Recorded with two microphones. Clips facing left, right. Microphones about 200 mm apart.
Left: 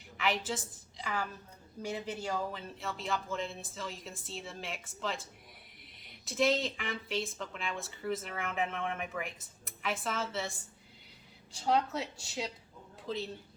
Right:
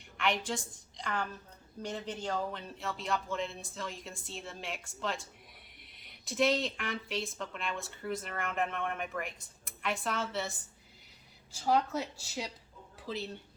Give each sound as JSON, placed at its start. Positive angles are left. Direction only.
{"t": 0.2, "sound": "a woman's voice", "side_deg": 0}
{"t": 11.6, "sound": "a woman's voice", "side_deg": 0}